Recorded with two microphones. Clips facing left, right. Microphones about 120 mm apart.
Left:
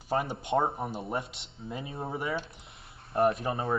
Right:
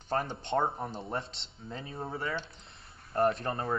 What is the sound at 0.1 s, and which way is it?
Speech, 5° left (ahead or behind).